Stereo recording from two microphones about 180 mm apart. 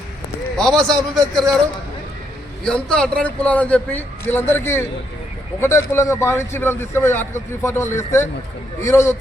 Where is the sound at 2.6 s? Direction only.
5° left (ahead or behind).